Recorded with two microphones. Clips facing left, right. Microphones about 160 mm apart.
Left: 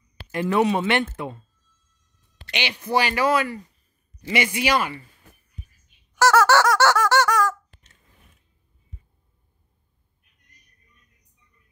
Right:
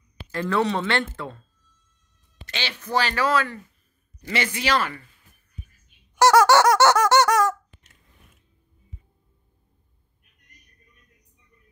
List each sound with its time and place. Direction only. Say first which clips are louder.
0.3 s speech: left 3 dB; 20° left (ahead or behind)
2.5 s speech: left 2 dB; 15° left (ahead or behind)
5.2 s music: left 7 dB; 70° left (ahead or behind)
6.1 s squeak: right 2 dB; 15° right (ahead or behind)